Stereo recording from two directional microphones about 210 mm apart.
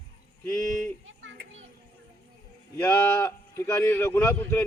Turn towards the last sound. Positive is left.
turn(degrees=10)  # may be behind; listen again after turning